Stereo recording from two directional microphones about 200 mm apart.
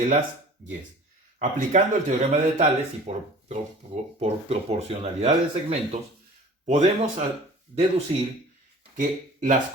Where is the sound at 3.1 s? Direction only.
30° right (ahead or behind).